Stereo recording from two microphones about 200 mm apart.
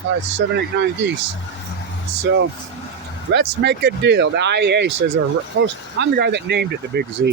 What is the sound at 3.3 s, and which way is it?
Speech, 60° right (ahead or behind).